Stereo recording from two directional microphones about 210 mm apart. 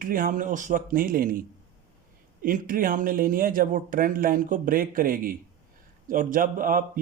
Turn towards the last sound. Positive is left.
turn(degrees=-40)  # may be behind; listen again after turning